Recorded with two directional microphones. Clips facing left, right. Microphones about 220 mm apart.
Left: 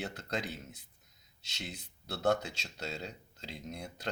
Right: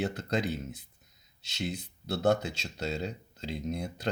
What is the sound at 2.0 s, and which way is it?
Speech, 25° right (ahead or behind).